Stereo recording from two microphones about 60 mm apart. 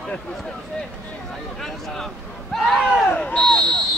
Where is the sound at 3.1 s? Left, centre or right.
Centre.